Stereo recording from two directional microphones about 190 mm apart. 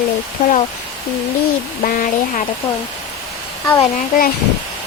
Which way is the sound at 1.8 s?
45° left (ahead or behind).